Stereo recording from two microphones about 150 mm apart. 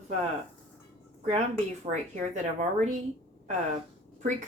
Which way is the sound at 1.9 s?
50° right (ahead or behind).